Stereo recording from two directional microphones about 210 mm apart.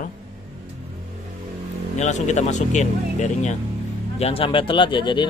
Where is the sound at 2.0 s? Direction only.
35° left (ahead or behind).